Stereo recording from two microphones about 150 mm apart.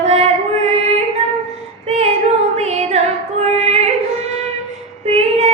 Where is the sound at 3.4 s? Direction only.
45° right (ahead or behind).